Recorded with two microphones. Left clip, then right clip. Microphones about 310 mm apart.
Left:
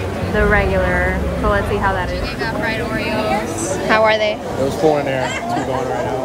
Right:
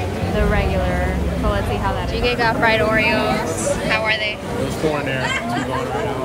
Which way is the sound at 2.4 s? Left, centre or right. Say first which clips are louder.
Right 5 dB; centre.